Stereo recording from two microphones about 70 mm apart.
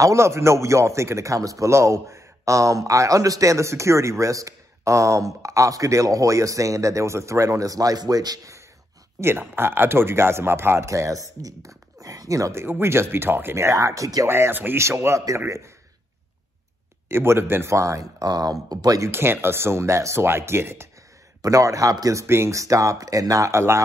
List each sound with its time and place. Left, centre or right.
0.0 s a man's voice: right
9.2 s speech: right
12.6 s speech: right
13.7 s a man's voice: right
14.2 s speech: right
17.1 s speech: right
18.2 s speech: right
19.0 s speech: right
21.4 s a man's voice: right
22.2 s speech: right
22.6 s a man's voice: right